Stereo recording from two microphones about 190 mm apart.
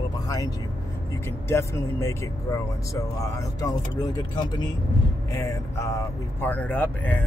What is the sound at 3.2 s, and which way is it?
Speech, 15° left (ahead or behind).